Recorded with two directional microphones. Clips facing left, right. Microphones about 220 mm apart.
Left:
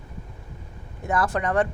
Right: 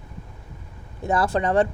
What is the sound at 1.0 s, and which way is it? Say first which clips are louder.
Speech: right 3 dB; 30° right (ahead or behind).